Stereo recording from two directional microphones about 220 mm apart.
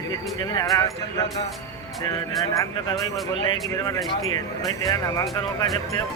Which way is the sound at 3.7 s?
15° left (ahead or behind).